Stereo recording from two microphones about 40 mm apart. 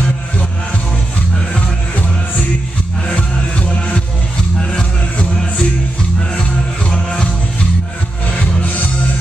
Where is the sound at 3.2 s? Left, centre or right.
Left.